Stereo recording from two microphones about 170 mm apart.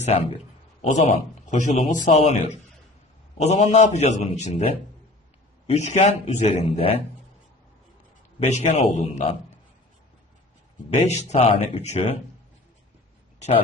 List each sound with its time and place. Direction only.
0.0 s a man's voice: 35° left (ahead or behind)
8.4 s a man's voice: 40° left (ahead or behind)
10.9 s a man's voice: 40° left (ahead or behind)